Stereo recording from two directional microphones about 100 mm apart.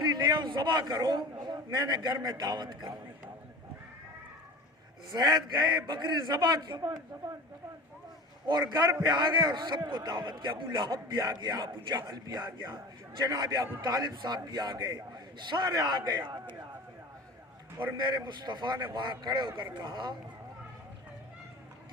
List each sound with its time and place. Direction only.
0.0 s a man's voice: 45° right (ahead or behind)
5.1 s a man's voice: 45° right (ahead or behind)
8.6 s a man's voice: 25° right (ahead or behind)
9.0 s a man's voice: 45° right (ahead or behind)
12.5 s a man's voice: 30° right (ahead or behind)
13.2 s a man's voice: 40° right (ahead or behind)
17.9 s a man's voice: 50° right (ahead or behind)